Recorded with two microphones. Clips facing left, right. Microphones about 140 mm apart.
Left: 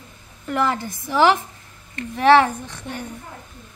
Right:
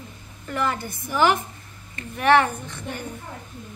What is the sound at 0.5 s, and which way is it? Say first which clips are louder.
Speech: left 4 dB; 90° left.